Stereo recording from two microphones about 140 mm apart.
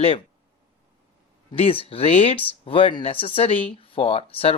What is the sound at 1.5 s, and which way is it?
Speech, 40° left (ahead or behind).